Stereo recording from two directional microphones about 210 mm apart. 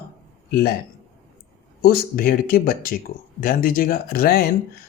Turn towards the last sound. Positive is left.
turn(degrees=45)  # may be behind; listen again after turning